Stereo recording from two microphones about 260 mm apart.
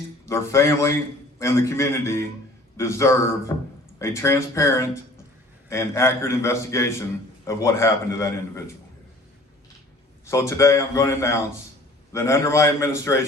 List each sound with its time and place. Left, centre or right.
0.3 s a man's voice: centre
10.2 s a man's voice: centre